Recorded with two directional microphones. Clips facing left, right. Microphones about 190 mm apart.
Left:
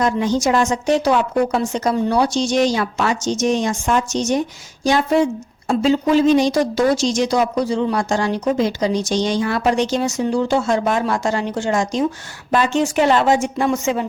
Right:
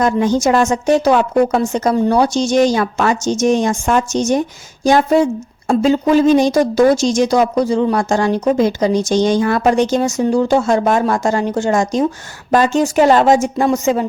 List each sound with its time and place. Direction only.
0.0 s speech: 50° right (ahead or behind)